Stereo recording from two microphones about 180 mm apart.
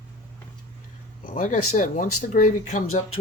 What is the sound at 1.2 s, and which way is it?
Speech, 45° left (ahead or behind).